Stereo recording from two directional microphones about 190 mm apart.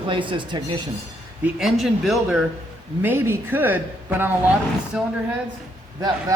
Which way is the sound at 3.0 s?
10° right (ahead or behind).